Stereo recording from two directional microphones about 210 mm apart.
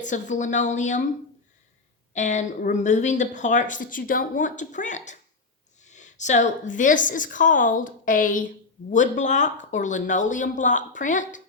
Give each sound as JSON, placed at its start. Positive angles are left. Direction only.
{"t": 0.0, "sound": "a woman's voice", "side_deg": 35}
{"t": 2.1, "sound": "a woman's voice", "side_deg": 35}